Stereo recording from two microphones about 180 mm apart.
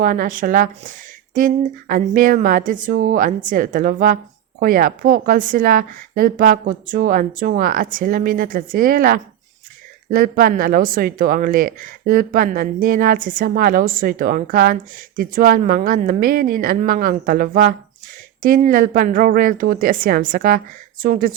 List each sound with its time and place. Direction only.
0.0 s a woman's voice: 50° right (ahead or behind)